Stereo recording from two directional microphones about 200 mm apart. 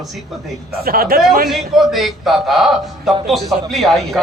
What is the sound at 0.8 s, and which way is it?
Speech, 50° right (ahead or behind).